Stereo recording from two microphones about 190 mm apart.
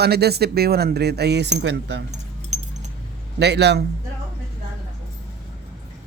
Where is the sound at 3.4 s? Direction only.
65° right (ahead or behind).